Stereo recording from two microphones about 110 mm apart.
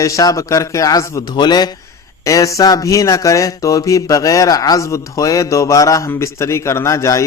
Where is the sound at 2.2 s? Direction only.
30° left (ahead or behind).